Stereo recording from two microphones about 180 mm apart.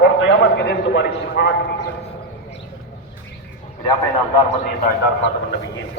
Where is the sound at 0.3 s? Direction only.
75° left (ahead or behind).